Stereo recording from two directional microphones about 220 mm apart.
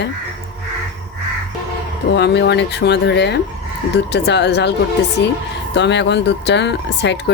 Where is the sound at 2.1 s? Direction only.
50° left (ahead or behind).